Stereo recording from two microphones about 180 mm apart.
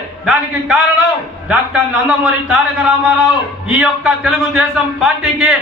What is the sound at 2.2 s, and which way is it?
A man's voice, 5° right (ahead or behind).